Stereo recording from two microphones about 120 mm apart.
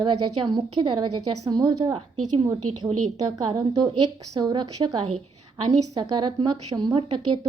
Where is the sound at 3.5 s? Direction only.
35° right (ahead or behind).